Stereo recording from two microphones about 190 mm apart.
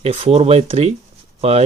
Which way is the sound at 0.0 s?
30° right (ahead or behind).